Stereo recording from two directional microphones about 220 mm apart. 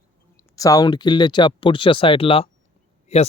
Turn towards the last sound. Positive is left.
turn(degrees=30)  # may be behind; listen again after turning